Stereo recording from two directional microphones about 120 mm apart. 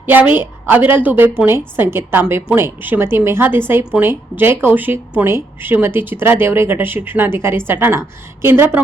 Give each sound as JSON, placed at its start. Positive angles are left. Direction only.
{"t": 0.0, "sound": "a woman's voice", "side_deg": -15}